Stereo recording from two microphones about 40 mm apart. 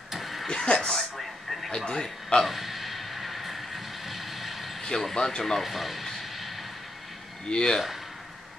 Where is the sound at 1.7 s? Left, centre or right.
Centre.